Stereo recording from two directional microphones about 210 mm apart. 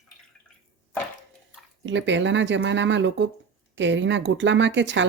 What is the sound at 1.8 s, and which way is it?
Speech, 60° right (ahead or behind).